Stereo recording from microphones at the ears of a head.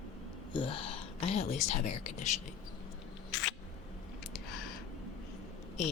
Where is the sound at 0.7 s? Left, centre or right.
Left.